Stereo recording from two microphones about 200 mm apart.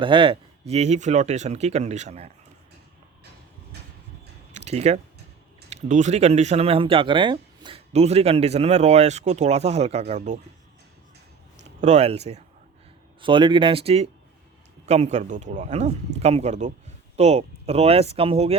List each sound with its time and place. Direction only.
0.0 s speech: 25° right (ahead or behind)
4.5 s a sound: 35° right (ahead or behind)
5.7 s speech: 35° right (ahead or behind)
11.8 s speech: 35° right (ahead or behind)